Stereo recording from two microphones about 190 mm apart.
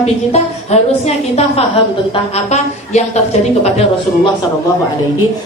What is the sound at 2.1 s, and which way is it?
A woman's voice, 35° left (ahead or behind).